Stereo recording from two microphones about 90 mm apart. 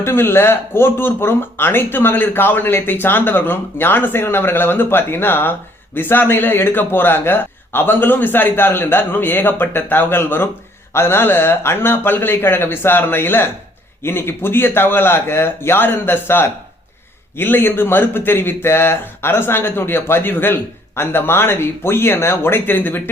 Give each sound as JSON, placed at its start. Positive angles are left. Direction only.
{"t": 0.0, "sound": "speech", "side_deg": 25}